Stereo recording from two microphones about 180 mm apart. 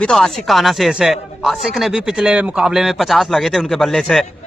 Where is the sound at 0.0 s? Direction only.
5° left (ahead or behind).